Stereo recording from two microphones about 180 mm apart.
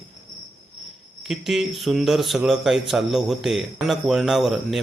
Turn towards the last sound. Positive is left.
turn(degrees=0)  # may be behind; listen again after turning